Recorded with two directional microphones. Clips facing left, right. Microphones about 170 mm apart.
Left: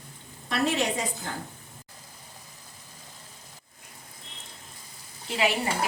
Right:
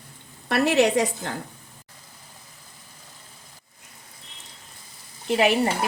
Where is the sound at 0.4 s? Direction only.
70° right (ahead or behind).